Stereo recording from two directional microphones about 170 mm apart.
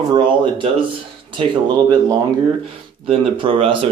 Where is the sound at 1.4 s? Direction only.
25° right (ahead or behind).